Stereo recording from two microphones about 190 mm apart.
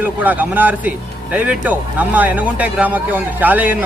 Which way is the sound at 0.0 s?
10° right (ahead or behind).